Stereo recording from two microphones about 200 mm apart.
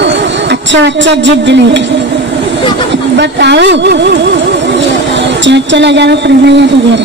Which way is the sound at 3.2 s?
60° right (ahead or behind).